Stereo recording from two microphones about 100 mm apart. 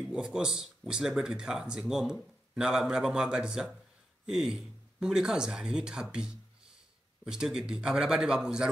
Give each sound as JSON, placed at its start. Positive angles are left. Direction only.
{"t": 0.0, "sound": "speech", "side_deg": -5}